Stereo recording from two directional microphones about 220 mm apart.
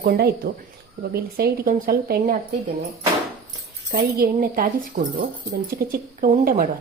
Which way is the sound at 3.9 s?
40° right (ahead or behind).